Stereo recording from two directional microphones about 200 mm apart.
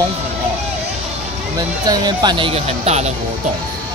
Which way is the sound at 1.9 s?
20° right (ahead or behind).